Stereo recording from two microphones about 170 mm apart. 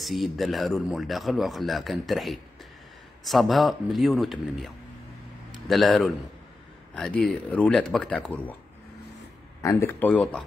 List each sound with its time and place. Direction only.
0.0 s speech: centre (ahead or behind)
9.6 s speech: 15° left (ahead or behind)